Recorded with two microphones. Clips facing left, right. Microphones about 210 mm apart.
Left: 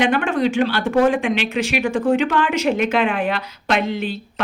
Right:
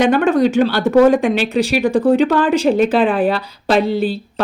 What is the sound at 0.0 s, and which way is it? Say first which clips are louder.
Speech: right 5 dB; 40° right (ahead or behind).